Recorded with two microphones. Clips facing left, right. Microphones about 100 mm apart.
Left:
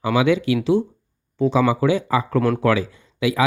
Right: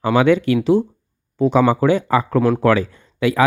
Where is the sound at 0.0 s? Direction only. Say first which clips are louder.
Right 3 dB; 50° right (ahead or behind).